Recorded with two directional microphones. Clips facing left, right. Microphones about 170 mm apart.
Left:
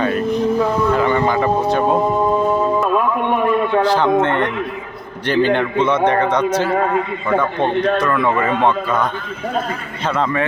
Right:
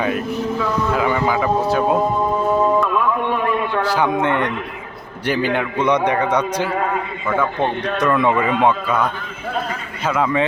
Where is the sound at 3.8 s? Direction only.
10° right (ahead or behind).